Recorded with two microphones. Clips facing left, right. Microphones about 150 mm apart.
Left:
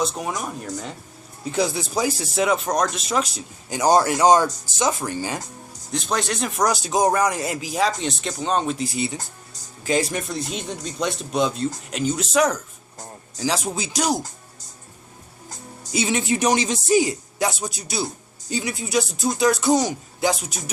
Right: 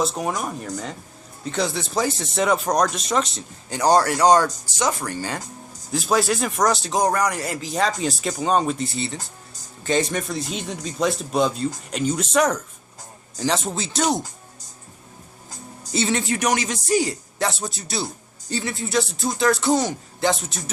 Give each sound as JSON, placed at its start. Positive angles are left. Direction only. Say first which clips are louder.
{"t": 0.0, "sound": "a man's voice", "louder": "right 2 dB", "side_deg": 0}
{"t": 3.8, "sound": "a man's voice", "louder": "even", "side_deg": 20}
{"t": 5.9, "sound": "a man's voice", "louder": "right 4 dB", "side_deg": -5}
{"t": 6.6, "sound": "a man's voice", "louder": "left 1 dB", "side_deg": 10}
{"t": 7.0, "sound": "speech", "louder": "left 3 dB", "side_deg": 20}
{"t": 7.6, "sound": "a man's voice", "louder": "right 1 dB", "side_deg": 5}
{"t": 15.9, "sound": "a man's voice", "louder": "even", "side_deg": 15}
{"t": 17.7, "sound": "a man's voice", "louder": "left 1 dB", "side_deg": 0}
{"t": 18.4, "sound": "a man's voice", "louder": "even", "side_deg": 15}